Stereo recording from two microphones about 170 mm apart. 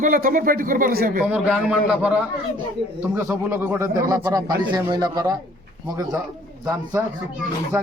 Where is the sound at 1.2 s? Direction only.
5° right (ahead or behind); by 5.4 s 25° right (ahead or behind).